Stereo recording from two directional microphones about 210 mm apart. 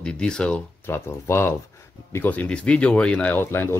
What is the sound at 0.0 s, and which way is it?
Speech, 5° left (ahead or behind).